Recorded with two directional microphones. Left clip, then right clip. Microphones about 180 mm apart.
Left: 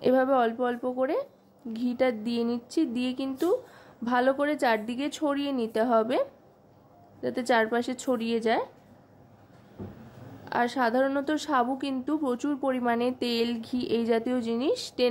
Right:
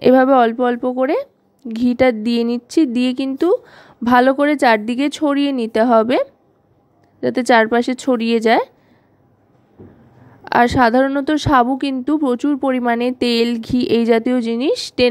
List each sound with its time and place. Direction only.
0.0 s speech: 45° right (ahead or behind)
10.4 s speech: 50° right (ahead or behind)